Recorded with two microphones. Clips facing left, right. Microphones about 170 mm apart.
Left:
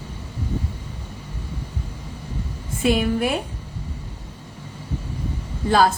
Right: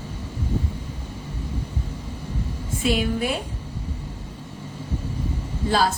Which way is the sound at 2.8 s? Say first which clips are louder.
Left 3 dB; 55° left (ahead or behind).